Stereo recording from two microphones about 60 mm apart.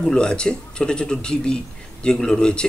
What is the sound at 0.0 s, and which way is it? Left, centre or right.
Speech, centre.